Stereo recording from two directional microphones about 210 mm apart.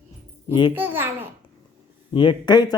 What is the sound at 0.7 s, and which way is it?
Speech, 10° right (ahead or behind).